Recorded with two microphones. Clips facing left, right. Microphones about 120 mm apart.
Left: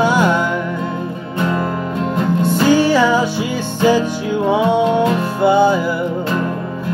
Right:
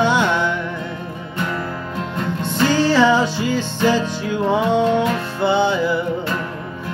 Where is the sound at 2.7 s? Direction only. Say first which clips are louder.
Right 1 dB; 10° left (ahead or behind).